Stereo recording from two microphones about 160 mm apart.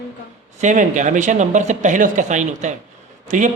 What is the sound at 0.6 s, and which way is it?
Speech, 50° right (ahead or behind).